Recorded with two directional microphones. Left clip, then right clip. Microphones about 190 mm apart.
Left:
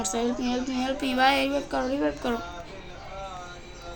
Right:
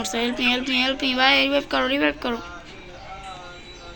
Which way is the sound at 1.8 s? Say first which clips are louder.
Right 6 dB; 15° right (ahead or behind).